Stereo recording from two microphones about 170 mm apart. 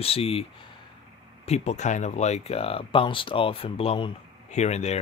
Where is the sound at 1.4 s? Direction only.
40° left (ahead or behind).